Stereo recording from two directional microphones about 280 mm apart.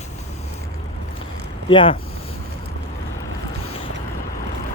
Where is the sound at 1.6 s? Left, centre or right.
Centre.